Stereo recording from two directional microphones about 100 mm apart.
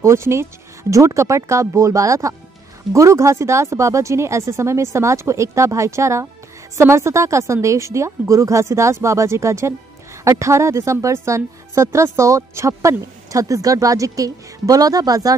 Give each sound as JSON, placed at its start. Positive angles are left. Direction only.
{"t": 0.0, "sound": "a woman's voice", "side_deg": -25}